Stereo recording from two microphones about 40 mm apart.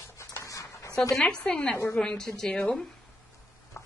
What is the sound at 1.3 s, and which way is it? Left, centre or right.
Speech, left.